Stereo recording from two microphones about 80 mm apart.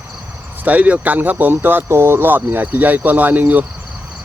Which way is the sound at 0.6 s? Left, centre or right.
Centre.